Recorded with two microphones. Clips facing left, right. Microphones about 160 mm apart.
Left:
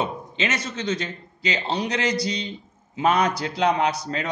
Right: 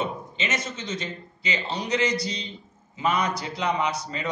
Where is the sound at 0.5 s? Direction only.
70° left (ahead or behind).